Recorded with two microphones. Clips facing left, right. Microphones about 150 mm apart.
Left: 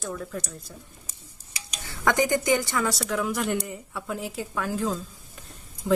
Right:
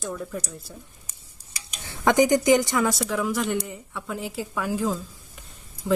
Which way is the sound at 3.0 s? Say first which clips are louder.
Right 2 dB; centre (ahead or behind).